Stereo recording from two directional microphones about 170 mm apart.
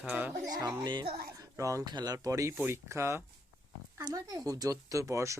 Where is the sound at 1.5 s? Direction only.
20° right (ahead or behind).